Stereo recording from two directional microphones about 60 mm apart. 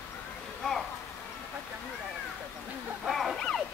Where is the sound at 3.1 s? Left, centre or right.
Centre.